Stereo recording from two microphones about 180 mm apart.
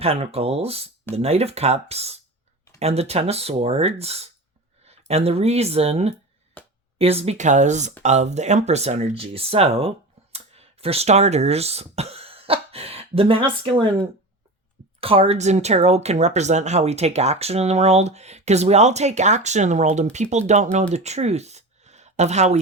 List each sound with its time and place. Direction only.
0.0 s speech: 35° right (ahead or behind)
6.6 s a sound: 10° left (ahead or behind)
7.0 s speech: 35° right (ahead or behind)
10.3 s throat clearing: 35° right (ahead or behind)
15.0 s speech: 30° right (ahead or behind)